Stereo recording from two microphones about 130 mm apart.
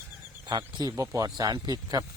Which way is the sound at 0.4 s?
30° right (ahead or behind).